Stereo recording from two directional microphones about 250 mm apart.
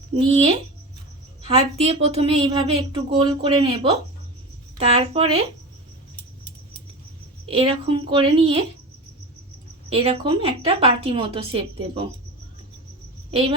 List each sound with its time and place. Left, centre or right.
0.3 s a woman's voice: right
7.4 s a woman's voice: right
9.9 s a woman's voice: right